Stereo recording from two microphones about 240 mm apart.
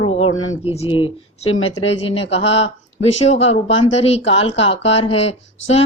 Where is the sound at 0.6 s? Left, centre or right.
Left.